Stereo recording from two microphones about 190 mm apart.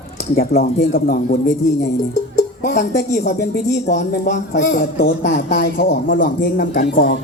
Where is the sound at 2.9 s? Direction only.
60° left (ahead or behind).